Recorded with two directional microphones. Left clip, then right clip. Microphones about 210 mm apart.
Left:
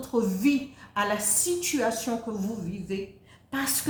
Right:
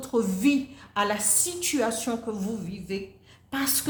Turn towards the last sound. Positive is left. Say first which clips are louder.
# right 1 dB
turn(degrees=-40)  # may be behind; listen again after turning